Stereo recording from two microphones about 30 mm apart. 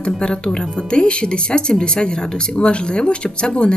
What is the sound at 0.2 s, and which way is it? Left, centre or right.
A woman's voice, left.